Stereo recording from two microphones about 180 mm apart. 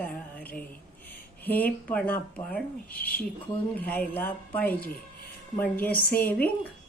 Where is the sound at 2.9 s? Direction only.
55° left (ahead or behind).